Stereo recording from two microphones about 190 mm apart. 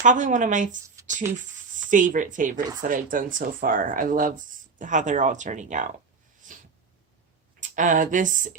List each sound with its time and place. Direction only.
0.0 s speech: 40° right (ahead or behind)
1.0 s a sound: 15° right (ahead or behind)
1.9 s speech: 45° right (ahead or behind)
6.4 s sneeze: 40° right (ahead or behind)
7.8 s speech: 40° right (ahead or behind)